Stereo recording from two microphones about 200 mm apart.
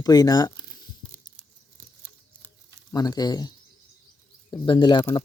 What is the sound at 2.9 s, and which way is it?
Speech, 20° left (ahead or behind).